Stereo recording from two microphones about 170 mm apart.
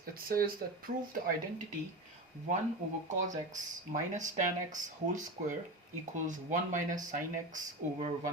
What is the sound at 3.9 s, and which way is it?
Speech, 50° right (ahead or behind).